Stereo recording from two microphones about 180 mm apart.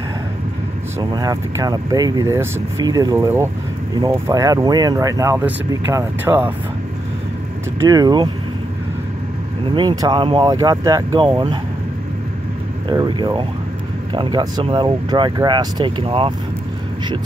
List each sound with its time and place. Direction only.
0.9 s speech: 20° right (ahead or behind)
7.9 s speech: 20° right (ahead or behind)
9.8 s speech: 25° right (ahead or behind)
12.8 s speech: 25° right (ahead or behind)